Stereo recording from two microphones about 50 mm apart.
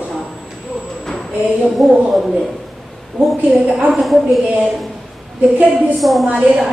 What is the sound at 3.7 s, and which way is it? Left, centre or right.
Speech, centre.